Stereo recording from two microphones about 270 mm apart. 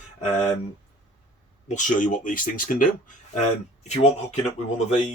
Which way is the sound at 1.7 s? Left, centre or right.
Left.